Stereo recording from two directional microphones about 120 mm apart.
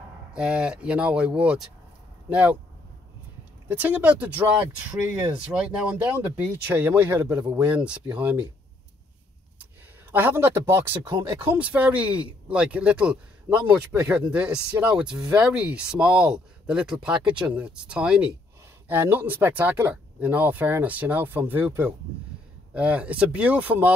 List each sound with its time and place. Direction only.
0.3 s speech: 10° right (ahead or behind)
3.6 s speech: 15° right (ahead or behind)
7.2 s speech: 30° right (ahead or behind)
7.5 s speech: 10° right (ahead or behind)
10.1 s speech: 20° right (ahead or behind)
11.1 s speech: 35° right (ahead or behind)
11.3 s speech: 15° right (ahead or behind)